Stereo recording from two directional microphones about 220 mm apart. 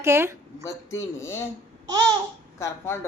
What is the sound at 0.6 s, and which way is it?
Speech, 15° left (ahead or behind).